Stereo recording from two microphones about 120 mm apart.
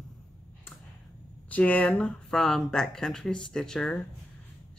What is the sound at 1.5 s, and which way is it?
Speech, 10° left (ahead or behind).